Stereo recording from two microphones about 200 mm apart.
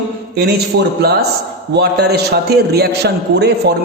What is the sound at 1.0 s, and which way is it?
A man's voice, 55° right (ahead or behind).